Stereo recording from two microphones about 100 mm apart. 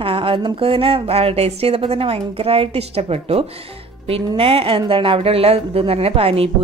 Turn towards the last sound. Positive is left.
turn(degrees=-75)  # may be behind; listen again after turning